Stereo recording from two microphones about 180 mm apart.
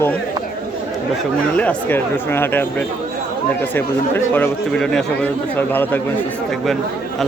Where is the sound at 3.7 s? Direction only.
10° left (ahead or behind).